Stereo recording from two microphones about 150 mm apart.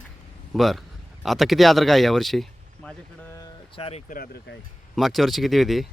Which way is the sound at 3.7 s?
40° left (ahead or behind).